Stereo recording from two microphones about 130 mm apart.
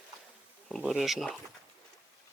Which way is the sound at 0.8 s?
Centre (ahead or behind).